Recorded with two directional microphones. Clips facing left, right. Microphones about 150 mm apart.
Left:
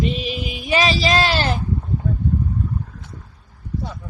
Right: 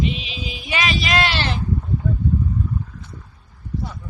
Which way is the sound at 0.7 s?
35° left (ahead or behind).